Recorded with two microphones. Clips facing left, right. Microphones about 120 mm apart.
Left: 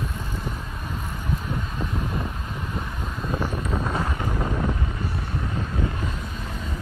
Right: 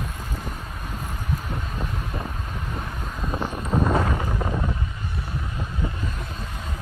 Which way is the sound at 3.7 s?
25° right (ahead or behind).